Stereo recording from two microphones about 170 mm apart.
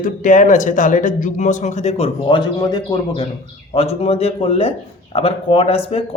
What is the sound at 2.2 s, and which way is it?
Speech, 25° left (ahead or behind).